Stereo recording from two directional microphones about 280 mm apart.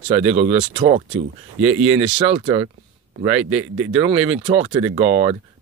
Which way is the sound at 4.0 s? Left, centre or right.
Centre.